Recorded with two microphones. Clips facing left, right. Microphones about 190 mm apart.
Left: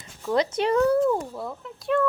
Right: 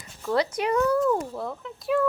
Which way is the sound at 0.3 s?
25° left (ahead or behind).